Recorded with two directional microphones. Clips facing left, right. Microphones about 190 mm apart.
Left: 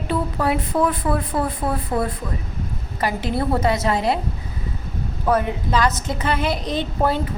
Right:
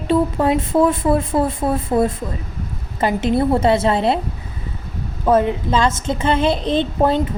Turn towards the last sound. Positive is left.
turn(degrees=-25)  # may be behind; listen again after turning